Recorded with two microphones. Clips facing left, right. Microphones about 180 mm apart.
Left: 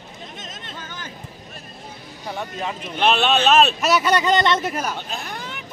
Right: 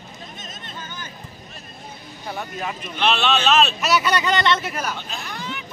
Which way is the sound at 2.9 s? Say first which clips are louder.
Left 2 dB; 50° left (ahead or behind).